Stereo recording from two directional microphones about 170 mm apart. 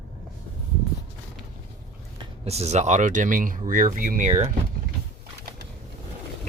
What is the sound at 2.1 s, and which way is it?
Speech, 35° right (ahead or behind).